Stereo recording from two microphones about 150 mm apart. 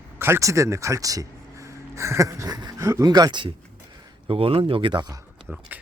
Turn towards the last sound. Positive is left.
turn(degrees=-30)  # may be behind; listen again after turning